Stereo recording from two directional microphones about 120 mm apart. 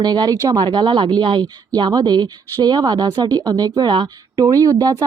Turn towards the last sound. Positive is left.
turn(degrees=-30)  # may be behind; listen again after turning